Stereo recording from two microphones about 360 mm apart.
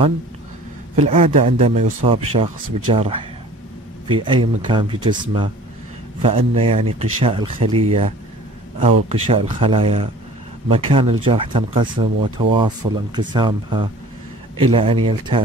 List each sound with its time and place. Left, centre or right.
0.9 s speech: centre